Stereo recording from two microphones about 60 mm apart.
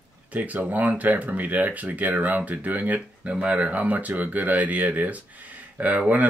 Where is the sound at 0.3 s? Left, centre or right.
Right.